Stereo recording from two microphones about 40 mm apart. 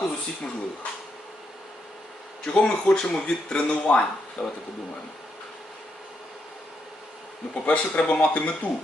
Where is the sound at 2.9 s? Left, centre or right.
Centre.